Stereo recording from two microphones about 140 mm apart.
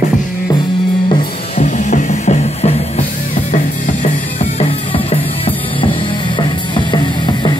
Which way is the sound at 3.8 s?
55° left (ahead or behind).